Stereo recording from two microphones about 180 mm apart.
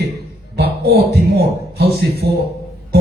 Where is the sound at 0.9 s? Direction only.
65° right (ahead or behind).